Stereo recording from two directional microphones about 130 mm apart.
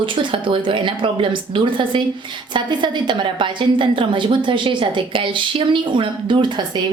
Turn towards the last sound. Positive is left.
turn(degrees=-35)  # may be behind; listen again after turning